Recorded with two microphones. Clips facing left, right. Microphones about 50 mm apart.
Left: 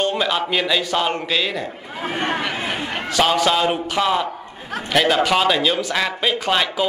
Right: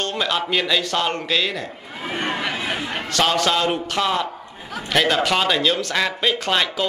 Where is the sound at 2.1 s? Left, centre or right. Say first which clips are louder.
Left 2 dB; left.